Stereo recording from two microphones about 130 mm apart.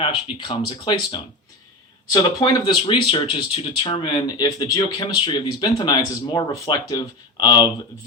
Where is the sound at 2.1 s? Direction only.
30° left (ahead or behind).